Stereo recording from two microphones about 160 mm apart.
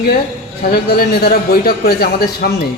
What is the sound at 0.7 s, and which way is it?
A man's voice, 75° left (ahead or behind).